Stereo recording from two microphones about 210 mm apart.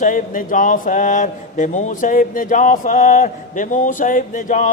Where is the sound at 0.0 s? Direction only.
40° left (ahead or behind).